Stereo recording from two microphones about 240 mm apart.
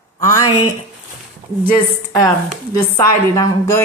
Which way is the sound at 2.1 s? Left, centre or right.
Centre.